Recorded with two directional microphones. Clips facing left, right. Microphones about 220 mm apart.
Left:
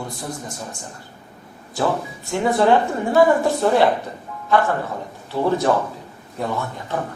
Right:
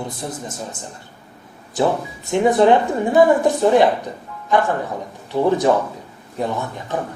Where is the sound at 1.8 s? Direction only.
20° right (ahead or behind).